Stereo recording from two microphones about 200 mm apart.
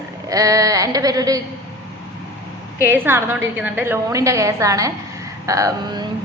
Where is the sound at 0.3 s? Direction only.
15° right (ahead or behind).